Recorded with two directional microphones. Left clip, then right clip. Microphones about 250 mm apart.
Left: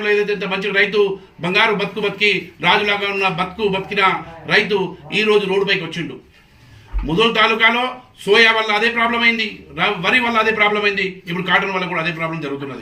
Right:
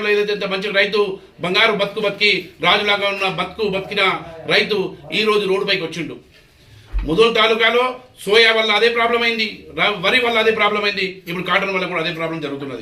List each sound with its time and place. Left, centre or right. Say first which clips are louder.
0.0 s a man's voice: even; centre
7.1 s a man's voice: right 1 dB; centre